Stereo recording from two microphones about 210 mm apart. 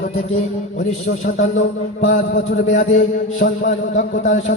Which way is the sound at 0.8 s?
35° left (ahead or behind).